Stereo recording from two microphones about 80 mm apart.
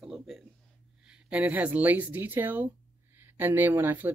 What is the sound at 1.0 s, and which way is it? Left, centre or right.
Speech, centre.